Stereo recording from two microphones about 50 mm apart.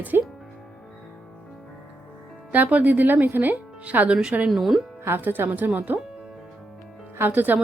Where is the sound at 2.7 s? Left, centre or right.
Right.